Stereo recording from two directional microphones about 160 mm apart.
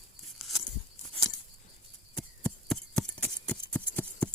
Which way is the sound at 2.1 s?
5° left (ahead or behind).